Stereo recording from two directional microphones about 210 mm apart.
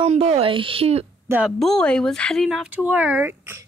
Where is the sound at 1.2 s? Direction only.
5° right (ahead or behind).